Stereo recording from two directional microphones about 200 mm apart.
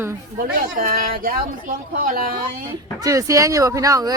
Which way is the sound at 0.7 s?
45° right (ahead or behind).